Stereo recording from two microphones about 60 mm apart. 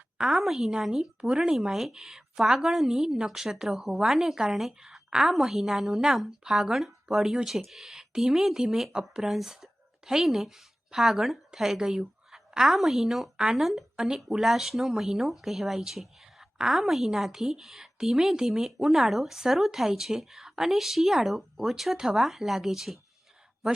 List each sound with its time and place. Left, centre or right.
0.2 s a woman's voice: centre